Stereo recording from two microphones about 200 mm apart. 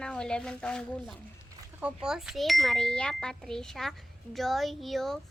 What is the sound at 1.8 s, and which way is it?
A child's voice, 5° right (ahead or behind).